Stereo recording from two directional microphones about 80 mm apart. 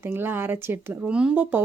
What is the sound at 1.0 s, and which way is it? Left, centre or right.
Speech, centre.